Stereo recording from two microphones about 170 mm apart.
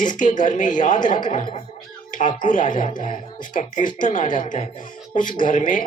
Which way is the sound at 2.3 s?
50° left (ahead or behind).